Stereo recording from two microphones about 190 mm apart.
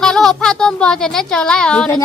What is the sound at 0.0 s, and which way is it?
Speech, centre (ahead or behind).